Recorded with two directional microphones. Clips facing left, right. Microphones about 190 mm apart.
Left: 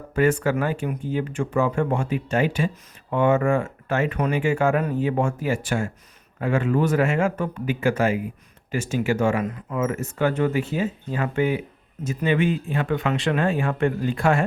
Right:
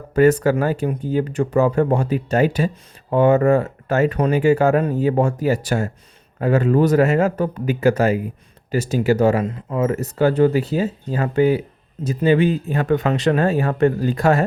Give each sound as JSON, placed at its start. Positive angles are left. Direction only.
{"t": 0.1, "sound": "speech", "side_deg": -40}